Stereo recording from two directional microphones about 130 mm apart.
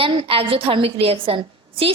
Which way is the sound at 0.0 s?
45° right (ahead or behind).